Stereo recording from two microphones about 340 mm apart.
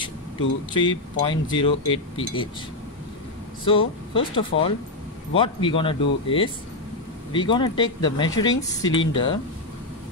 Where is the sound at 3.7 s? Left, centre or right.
Centre.